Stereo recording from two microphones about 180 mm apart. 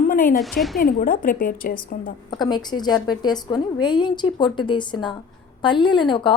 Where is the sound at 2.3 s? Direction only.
25° left (ahead or behind).